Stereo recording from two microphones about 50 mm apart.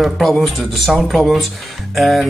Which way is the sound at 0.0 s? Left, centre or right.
Centre.